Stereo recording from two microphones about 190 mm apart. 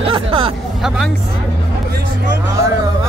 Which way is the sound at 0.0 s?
30° right (ahead or behind).